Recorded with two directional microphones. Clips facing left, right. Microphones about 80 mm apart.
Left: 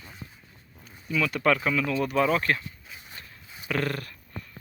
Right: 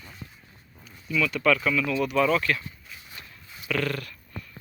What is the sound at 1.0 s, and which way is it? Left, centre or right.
Speech, left.